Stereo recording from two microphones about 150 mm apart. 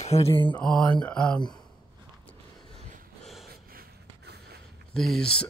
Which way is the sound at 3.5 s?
85° right.